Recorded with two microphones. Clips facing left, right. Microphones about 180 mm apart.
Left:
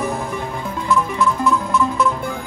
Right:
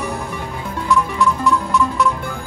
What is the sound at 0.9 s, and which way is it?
Music, 20° left (ahead or behind).